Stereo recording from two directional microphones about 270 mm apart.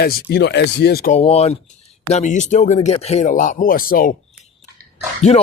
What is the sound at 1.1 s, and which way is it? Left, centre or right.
Speech, left.